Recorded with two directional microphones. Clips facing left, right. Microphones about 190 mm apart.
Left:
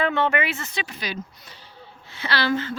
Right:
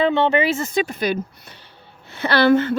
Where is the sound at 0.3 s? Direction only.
40° right (ahead or behind).